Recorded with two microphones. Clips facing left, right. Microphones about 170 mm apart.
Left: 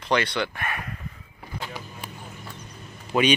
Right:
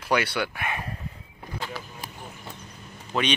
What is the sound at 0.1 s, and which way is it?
Speech, 10° right (ahead or behind).